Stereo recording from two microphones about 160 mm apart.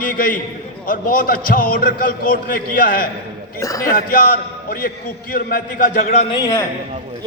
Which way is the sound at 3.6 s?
20° left (ahead or behind).